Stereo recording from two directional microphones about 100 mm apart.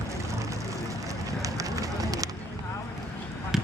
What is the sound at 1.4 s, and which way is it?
Run, 35° right (ahead or behind).